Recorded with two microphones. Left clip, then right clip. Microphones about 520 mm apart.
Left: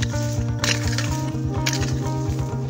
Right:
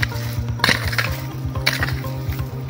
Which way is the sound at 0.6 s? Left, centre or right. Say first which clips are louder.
Right 6 dB; left.